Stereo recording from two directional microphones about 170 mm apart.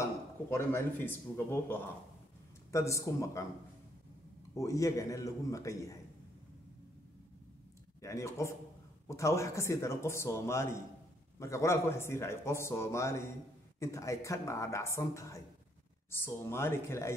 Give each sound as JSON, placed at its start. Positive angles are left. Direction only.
{"t": 0.0, "sound": "speech", "side_deg": 15}
{"t": 4.6, "sound": "a man's voice", "side_deg": 20}
{"t": 8.0, "sound": "speech", "side_deg": 15}